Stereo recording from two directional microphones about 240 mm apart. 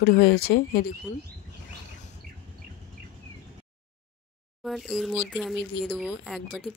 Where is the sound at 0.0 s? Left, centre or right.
Left.